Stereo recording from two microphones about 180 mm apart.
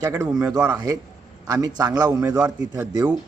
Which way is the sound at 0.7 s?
20° right (ahead or behind).